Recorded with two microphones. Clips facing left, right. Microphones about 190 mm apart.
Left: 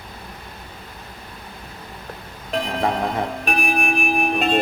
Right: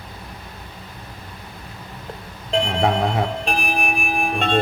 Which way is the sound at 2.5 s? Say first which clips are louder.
Right 3 dB; 25° right (ahead or behind).